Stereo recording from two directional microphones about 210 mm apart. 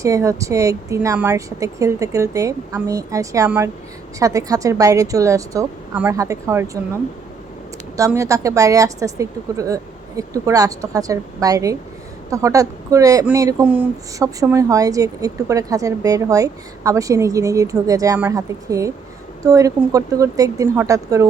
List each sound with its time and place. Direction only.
0.0 s speech: 15° right (ahead or behind)
7.9 s speech: 15° right (ahead or behind)